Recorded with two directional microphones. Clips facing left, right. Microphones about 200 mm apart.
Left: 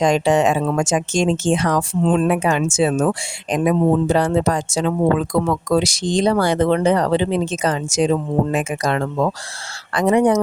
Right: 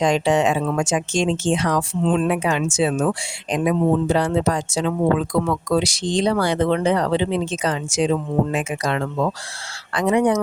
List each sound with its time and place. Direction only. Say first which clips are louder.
0.0 s speech: left 2 dB; 45° left (ahead or behind)